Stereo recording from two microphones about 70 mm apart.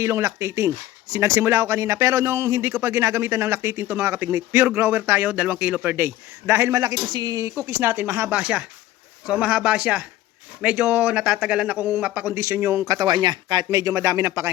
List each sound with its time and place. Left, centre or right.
0.0 s speech: right
6.0 s speech: right
6.7 s a man's voice: right
7.1 s speech: right
7.4 s speech: right
8.3 s speech: centre
12.3 s speech: right
12.8 s speech: right
13.7 s speech: right